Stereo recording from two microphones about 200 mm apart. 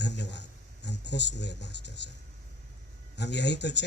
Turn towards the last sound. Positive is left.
turn(degrees=60)  # may be behind; listen again after turning